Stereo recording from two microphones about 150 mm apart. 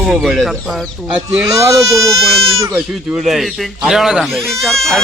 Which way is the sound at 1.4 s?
20° right (ahead or behind).